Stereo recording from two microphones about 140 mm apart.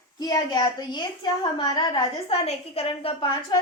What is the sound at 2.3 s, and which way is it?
Speech, 45° left (ahead or behind).